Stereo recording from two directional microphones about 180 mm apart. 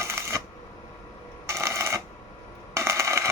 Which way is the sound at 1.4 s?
15° right (ahead or behind).